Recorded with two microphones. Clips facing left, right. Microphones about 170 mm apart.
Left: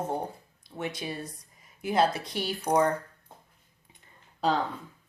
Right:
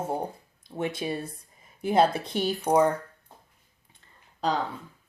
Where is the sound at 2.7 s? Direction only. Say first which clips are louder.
Right 2 dB; 10° right (ahead or behind).